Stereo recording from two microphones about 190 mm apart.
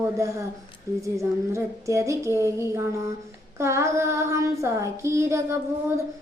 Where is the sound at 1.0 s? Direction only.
15° right (ahead or behind).